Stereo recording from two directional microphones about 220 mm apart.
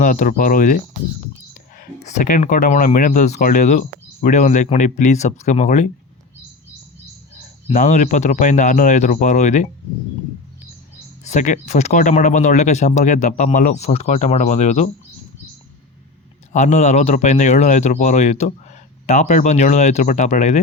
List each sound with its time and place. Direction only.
0.0 s speech: 35° left (ahead or behind)
1.8 s speech: 35° left (ahead or behind)
7.7 s speech: 35° left (ahead or behind)
11.2 s speech: 30° left (ahead or behind)
16.5 s speech: 30° left (ahead or behind)